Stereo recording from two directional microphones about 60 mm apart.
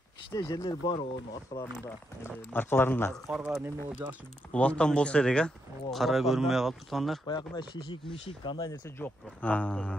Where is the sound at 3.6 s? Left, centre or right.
Right.